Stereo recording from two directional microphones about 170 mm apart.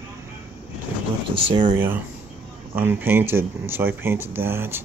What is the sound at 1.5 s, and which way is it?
Speech, 30° right (ahead or behind).